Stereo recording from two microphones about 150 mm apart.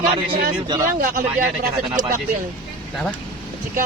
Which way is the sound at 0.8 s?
65° right (ahead or behind).